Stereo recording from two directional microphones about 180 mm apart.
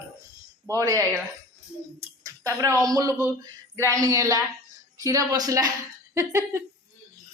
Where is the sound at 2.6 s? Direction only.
20° right (ahead or behind).